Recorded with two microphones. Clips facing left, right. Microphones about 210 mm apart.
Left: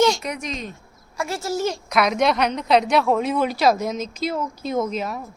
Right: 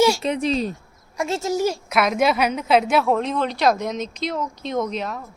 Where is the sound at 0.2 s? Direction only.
30° right (ahead or behind).